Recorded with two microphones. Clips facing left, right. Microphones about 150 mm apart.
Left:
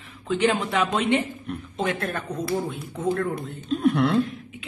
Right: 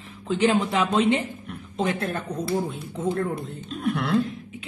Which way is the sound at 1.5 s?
Centre (ahead or behind).